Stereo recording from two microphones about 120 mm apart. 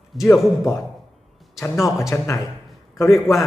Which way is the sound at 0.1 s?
Centre (ahead or behind).